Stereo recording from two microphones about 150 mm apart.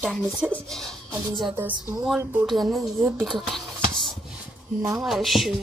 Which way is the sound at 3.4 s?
5° left (ahead or behind).